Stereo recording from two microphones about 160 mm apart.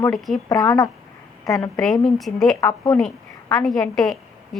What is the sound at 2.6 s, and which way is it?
Speech, 20° left (ahead or behind).